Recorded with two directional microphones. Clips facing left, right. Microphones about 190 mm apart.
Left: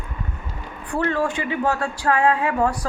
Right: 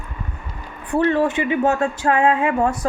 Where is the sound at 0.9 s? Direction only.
20° right (ahead or behind).